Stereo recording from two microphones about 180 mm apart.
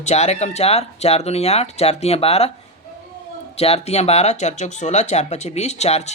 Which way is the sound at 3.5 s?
35° left (ahead or behind).